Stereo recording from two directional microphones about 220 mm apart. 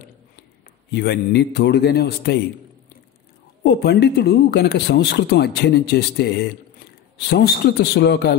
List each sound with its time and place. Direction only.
0.9 s speech: 50° left (ahead or behind)
3.6 s speech: 45° left (ahead or behind)